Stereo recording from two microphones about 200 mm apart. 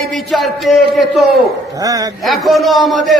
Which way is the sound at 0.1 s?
Centre (ahead or behind).